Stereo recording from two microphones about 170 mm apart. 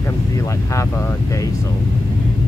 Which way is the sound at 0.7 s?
15° left (ahead or behind).